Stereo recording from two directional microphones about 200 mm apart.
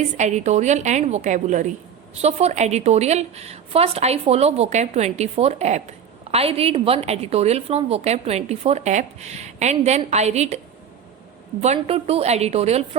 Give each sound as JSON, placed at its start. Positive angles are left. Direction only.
{"t": 0.2, "sound": "a woman's voice", "side_deg": -35}
{"t": 11.6, "sound": "a woman's voice", "side_deg": -30}